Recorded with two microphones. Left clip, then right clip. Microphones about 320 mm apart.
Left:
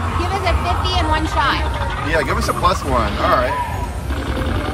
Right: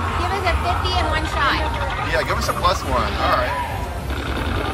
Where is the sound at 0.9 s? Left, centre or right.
Left.